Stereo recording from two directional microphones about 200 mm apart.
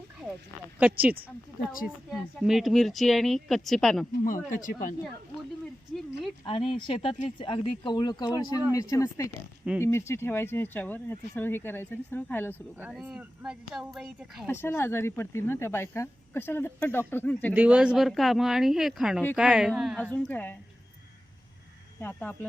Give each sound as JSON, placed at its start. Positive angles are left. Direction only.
{"t": 0.8, "sound": "speech", "side_deg": -5}
{"t": 2.4, "sound": "speech", "side_deg": 0}
{"t": 4.4, "sound": "speech", "side_deg": 40}
{"t": 6.4, "sound": "speech", "side_deg": 25}
{"t": 9.7, "sound": "speech", "side_deg": -5}
{"t": 10.1, "sound": "speech", "side_deg": 10}
{"t": 12.8, "sound": "speech", "side_deg": -5}
{"t": 14.4, "sound": "speech", "side_deg": 10}
{"t": 17.5, "sound": "speech", "side_deg": -5}
{"t": 22.0, "sound": "speech", "side_deg": 10}